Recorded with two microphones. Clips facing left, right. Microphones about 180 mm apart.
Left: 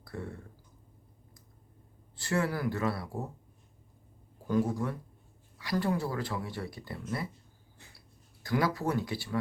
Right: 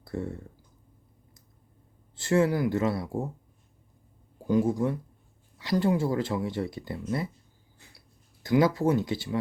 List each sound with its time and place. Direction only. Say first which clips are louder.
0.0 s speech: right 7 dB; 25° right (ahead or behind)
2.1 s speech: right 7 dB; 20° right (ahead or behind)
4.4 s speech: right 5 dB; 20° right (ahead or behind)
8.4 s speech: right 7 dB; 20° right (ahead or behind)